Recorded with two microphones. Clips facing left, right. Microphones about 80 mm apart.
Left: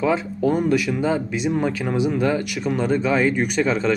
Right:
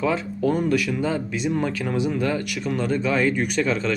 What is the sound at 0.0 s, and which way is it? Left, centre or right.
Speech, centre.